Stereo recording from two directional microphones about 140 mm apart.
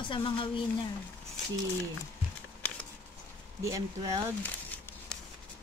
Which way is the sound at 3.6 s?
25° right (ahead or behind).